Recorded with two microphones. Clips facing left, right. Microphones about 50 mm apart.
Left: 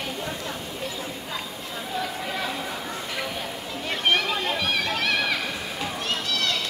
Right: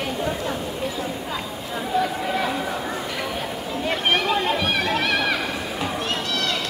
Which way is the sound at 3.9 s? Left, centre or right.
Centre.